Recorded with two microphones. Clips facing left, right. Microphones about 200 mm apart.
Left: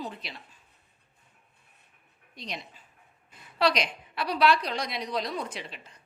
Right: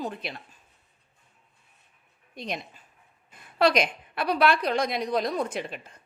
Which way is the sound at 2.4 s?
50° right (ahead or behind).